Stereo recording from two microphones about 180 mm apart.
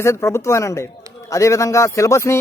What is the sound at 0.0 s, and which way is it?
Speech, 15° left (ahead or behind).